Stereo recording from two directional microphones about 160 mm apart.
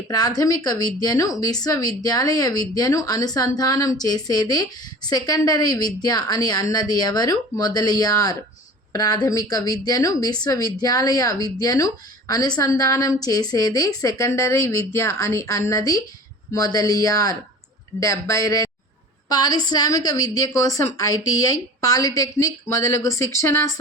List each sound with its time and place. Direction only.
0.1 s speech: 25° left (ahead or behind)